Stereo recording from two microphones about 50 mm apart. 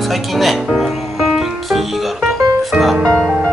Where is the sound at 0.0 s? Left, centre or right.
Centre.